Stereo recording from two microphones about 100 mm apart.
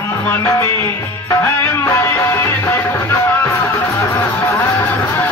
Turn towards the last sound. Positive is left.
turn(degrees=25)  # may be behind; listen again after turning